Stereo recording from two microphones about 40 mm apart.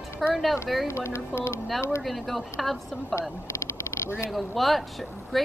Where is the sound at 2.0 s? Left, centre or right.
Centre.